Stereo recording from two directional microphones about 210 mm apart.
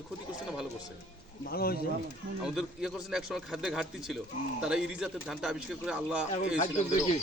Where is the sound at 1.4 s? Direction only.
45° left (ahead or behind).